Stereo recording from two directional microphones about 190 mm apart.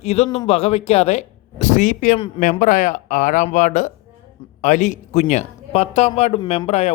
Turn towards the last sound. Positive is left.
turn(degrees=35)  # may be behind; listen again after turning